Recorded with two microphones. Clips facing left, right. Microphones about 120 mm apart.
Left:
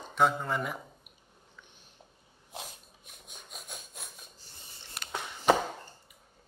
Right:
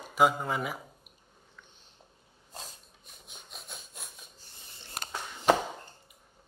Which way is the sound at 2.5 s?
5° left (ahead or behind).